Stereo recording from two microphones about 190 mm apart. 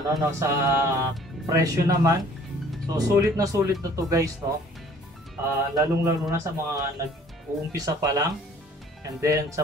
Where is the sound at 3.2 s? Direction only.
15° right (ahead or behind).